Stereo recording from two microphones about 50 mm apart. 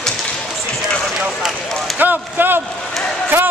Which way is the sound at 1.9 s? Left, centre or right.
Right.